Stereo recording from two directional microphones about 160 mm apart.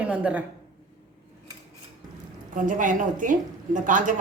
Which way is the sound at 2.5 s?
55° right (ahead or behind).